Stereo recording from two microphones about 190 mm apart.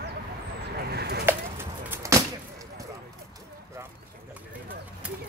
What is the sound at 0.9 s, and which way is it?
Bird, 55° right (ahead or behind).